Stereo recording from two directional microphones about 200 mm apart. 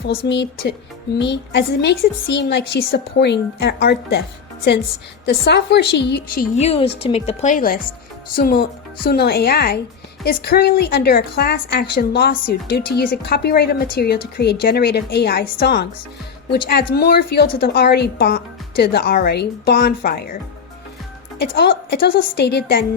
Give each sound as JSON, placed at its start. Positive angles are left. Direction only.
{"t": 0.1, "sound": "a woman's voice", "side_deg": 55}
{"t": 5.2, "sound": "a woman's voice", "side_deg": 55}
{"t": 6.6, "sound": "a woman's voice", "side_deg": 30}